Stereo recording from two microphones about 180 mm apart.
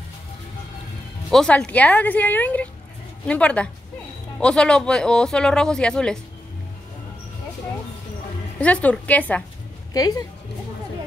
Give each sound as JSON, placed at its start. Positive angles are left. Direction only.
{"t": 1.3, "sound": "speech", "side_deg": 5}
{"t": 8.5, "sound": "speech", "side_deg": 5}
{"t": 9.9, "sound": "speech", "side_deg": 20}